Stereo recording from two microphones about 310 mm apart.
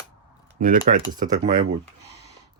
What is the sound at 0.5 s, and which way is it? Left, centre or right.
Speech, right.